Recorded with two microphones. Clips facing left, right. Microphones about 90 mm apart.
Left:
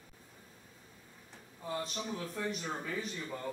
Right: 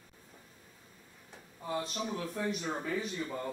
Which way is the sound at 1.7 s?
5° right (ahead or behind).